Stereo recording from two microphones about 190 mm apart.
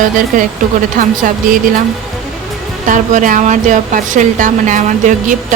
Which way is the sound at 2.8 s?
40° right (ahead or behind).